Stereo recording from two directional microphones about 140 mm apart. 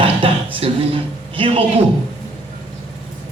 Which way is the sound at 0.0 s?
40° right (ahead or behind).